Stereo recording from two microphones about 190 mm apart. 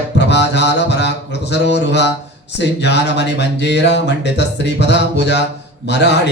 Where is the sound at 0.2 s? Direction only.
65° left (ahead or behind).